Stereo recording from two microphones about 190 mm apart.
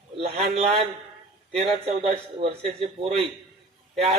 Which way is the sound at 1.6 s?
30° right (ahead or behind).